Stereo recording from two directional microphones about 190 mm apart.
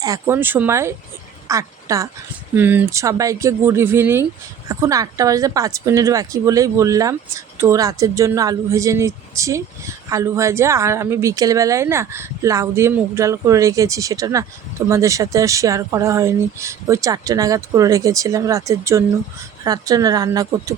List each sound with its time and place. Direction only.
0.0 s a woman's voice: 15° right (ahead or behind)